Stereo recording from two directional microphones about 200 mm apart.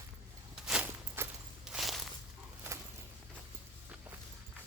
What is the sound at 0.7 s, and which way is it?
Walk, 10° right (ahead or behind).